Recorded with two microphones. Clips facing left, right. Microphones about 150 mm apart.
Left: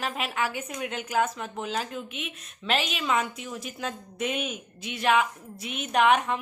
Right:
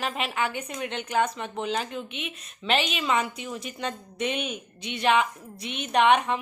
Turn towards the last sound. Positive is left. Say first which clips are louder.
# right 1 dB
turn(degrees=0)  # may be behind; listen again after turning